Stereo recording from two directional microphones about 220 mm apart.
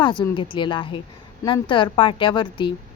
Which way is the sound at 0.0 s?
20° left (ahead or behind).